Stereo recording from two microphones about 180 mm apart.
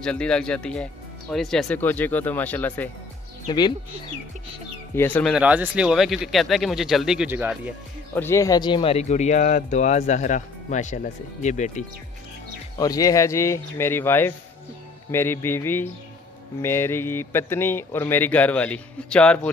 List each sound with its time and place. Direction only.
0.0 s speech: 5° left (ahead or behind)
3.4 s speech: 25° left (ahead or behind)
4.9 s speech: 10° left (ahead or behind)
5.3 s speech: 10° right (ahead or behind)
8.1 s speech: 15° left (ahead or behind); by 11.8 s 40° left (ahead or behind)
12.7 s speech: 20° left (ahead or behind)